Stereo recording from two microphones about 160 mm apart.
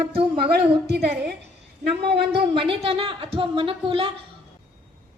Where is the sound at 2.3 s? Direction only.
35° right (ahead or behind).